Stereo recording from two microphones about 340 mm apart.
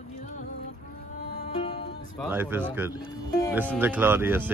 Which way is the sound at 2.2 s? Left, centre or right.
Centre.